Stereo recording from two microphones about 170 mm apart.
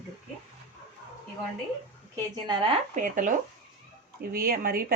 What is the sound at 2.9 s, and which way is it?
Speech, 50° right (ahead or behind).